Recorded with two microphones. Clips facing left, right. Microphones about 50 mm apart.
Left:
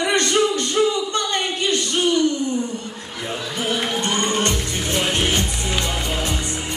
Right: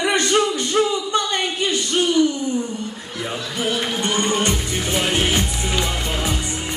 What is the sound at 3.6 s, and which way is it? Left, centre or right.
Speech, centre.